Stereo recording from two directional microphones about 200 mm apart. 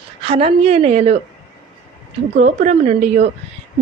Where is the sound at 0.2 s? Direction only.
30° right (ahead or behind).